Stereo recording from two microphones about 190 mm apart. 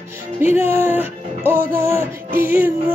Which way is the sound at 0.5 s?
10° right (ahead or behind).